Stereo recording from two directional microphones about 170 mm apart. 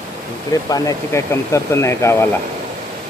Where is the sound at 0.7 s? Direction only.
20° left (ahead or behind).